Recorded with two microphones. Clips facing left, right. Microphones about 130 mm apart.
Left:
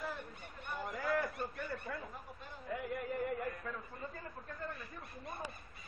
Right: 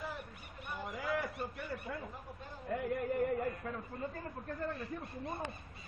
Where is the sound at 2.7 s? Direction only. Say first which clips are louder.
Right 4 dB; 50° right (ahead or behind).